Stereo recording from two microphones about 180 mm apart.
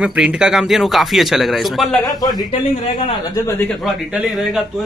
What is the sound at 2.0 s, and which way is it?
A man's voice, 20° left (ahead or behind).